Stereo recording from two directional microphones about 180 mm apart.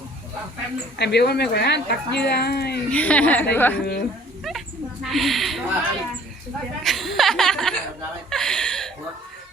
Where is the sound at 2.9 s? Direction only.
10° left (ahead or behind).